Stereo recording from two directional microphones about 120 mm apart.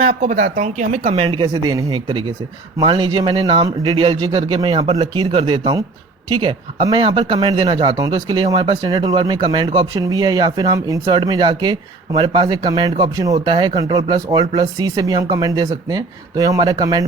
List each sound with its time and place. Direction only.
0.2 s speech: 90° right
1.2 s speech: 40° right (ahead or behind)
11.0 s speech: 40° right (ahead or behind)